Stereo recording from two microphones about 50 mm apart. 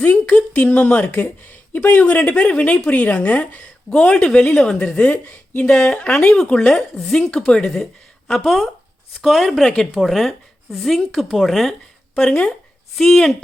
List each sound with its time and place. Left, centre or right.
0.0 s a woman's voice: left; by 4.9 s centre
4.9 s speech: left
5.2 s speech: left
5.6 s a woman's voice: left; by 11.7 s centre
12.1 s a woman's voice: centre